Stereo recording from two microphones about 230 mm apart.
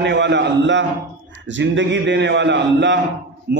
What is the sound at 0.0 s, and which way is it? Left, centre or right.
A man's voice, right.